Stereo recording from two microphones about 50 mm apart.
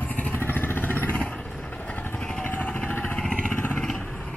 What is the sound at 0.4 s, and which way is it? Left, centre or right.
Vehicle, left.